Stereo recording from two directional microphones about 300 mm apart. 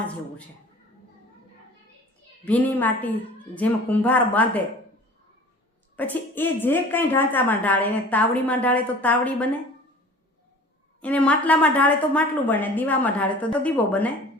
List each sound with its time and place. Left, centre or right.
2.4 s speech: centre
6.0 s speech: centre
11.0 s speech: centre